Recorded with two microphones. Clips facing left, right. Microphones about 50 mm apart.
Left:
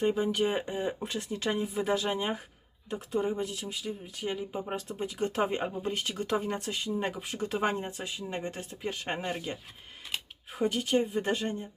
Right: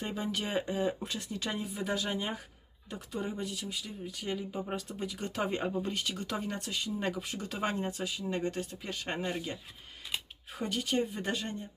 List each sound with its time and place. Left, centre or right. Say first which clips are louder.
0.0 s speech: left 8 dB; centre
1.0 s speech: left 5 dB; left
4.5 s speech: left 2 dB; left
5.0 s speech: left 6 dB; left
10.7 s speech: left 3 dB; left